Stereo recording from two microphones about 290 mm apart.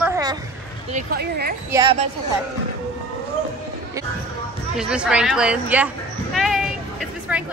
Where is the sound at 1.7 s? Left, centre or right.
Centre.